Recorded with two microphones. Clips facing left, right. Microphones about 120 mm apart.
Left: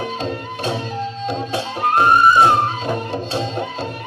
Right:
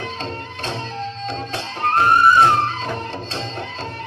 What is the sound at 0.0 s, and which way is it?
Music, 10° left (ahead or behind).